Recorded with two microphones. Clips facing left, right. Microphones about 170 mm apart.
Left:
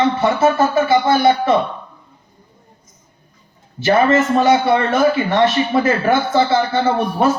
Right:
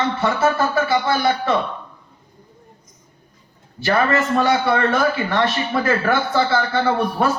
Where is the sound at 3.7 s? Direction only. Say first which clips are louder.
Left 5 dB; 20° left (ahead or behind).